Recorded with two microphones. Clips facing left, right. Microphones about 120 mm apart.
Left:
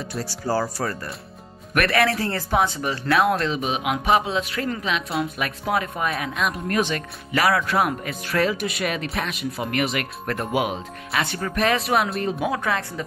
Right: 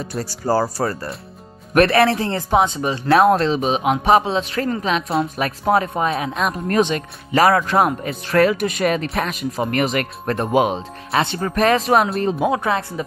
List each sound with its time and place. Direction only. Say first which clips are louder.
0.1 s speech: right 5 dB; 45° right (ahead or behind); by 3.0 s 20° right (ahead or behind)
3.1 s speech: right 6 dB; 35° right (ahead or behind)
7.3 s speech: right 5 dB; 40° right (ahead or behind)
8.4 s speech: right 7 dB; 60° right (ahead or behind)
8.6 s speech: right 6 dB; 40° right (ahead or behind); by 13.0 s 20° right (ahead or behind)